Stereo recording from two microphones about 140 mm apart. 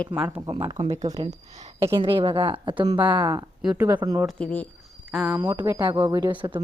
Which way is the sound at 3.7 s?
15° right (ahead or behind).